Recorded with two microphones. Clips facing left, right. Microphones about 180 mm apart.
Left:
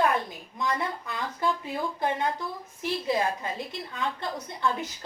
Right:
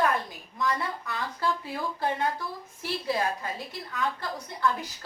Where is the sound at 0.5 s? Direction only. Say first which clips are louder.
Even; 20° left (ahead or behind).